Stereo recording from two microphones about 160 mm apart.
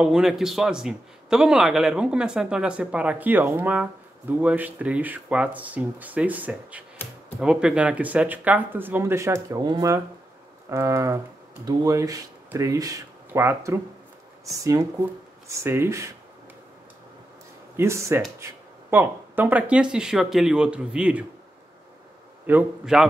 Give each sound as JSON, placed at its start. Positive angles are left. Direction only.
{"t": 0.0, "sound": "a man's voice", "side_deg": -5}
{"t": 17.7, "sound": "a man's voice", "side_deg": -15}
{"t": 22.5, "sound": "a man's voice", "side_deg": -10}